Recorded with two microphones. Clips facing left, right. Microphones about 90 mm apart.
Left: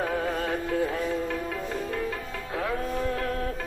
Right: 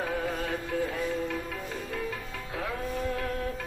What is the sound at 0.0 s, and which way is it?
Music, 40° left (ahead or behind).